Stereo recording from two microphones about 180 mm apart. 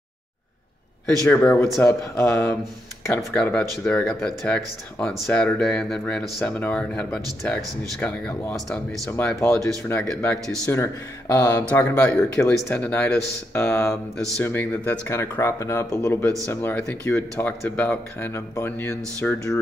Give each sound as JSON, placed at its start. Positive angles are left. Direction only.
{"t": 1.2, "sound": "speech", "side_deg": 10}
{"t": 9.6, "sound": "speech", "side_deg": 15}
{"t": 10.0, "sound": "speech", "side_deg": 5}
{"t": 10.7, "sound": "speech", "side_deg": 15}